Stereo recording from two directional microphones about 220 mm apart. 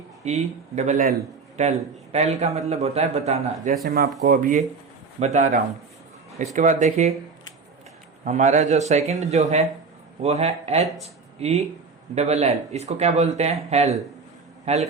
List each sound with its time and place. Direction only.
0.3 s a man's voice: 30° right (ahead or behind)
3.8 s a man's voice: 45° right (ahead or behind)
8.2 s a man's voice: 35° right (ahead or behind)